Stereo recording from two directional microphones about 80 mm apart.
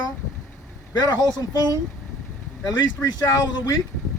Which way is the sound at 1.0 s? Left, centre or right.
Left.